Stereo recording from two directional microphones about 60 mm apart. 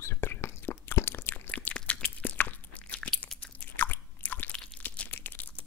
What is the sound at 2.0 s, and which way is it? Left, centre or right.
Crunch, left.